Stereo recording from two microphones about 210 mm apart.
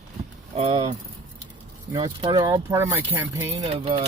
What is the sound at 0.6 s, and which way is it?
Speech, 25° right (ahead or behind).